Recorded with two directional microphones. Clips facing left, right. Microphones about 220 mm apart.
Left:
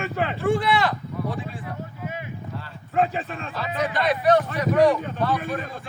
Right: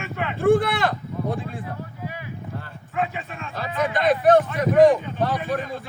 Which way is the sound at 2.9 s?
35° left (ahead or behind).